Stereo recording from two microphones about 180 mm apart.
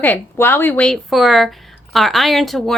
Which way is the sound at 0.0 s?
10° left (ahead or behind).